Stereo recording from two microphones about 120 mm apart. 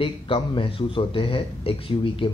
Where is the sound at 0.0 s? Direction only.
50° left (ahead or behind).